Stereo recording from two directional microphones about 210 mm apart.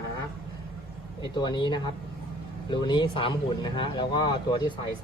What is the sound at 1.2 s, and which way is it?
Speech, 20° left (ahead or behind).